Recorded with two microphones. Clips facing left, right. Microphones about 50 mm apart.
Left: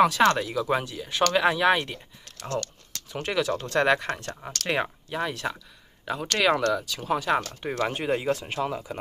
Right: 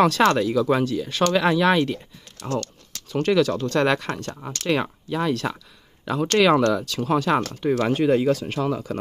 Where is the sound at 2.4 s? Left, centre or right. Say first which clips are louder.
Right 4 dB; centre.